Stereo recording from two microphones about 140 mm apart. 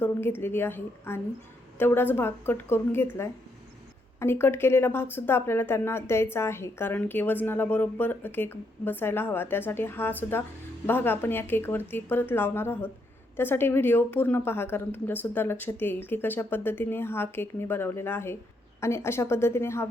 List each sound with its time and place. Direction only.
0.0 s a woman's voice: 15° left (ahead or behind)